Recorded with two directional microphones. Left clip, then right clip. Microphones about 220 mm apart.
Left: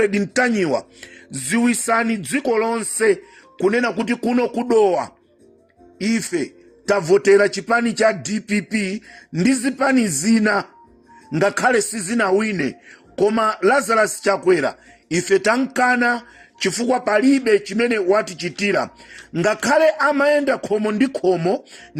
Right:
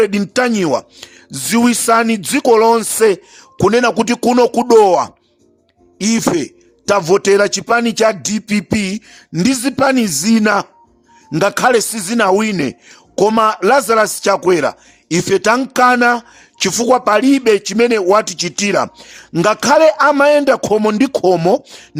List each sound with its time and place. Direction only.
0.0 s a man's voice: 30° right (ahead or behind)